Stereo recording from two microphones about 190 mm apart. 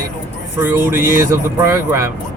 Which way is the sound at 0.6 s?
10° right (ahead or behind).